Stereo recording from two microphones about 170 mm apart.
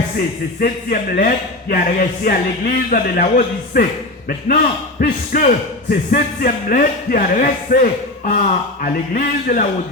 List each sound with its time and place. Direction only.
0.6 s a man's voice: 60° left (ahead or behind)